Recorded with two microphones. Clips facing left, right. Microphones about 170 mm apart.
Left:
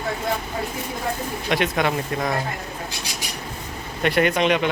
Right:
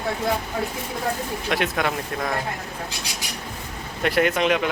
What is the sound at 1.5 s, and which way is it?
Speech, centre (ahead or behind).